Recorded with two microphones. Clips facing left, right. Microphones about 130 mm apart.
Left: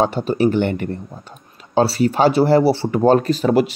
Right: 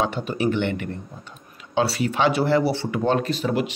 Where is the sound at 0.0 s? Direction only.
35° left (ahead or behind).